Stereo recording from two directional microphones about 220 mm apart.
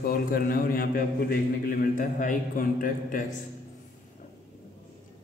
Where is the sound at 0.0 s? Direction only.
40° left (ahead or behind).